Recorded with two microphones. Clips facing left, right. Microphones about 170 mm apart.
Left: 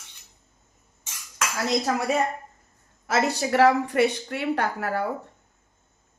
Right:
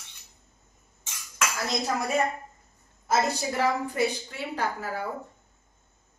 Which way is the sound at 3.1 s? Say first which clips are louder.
Left 3 dB; 70° left (ahead or behind).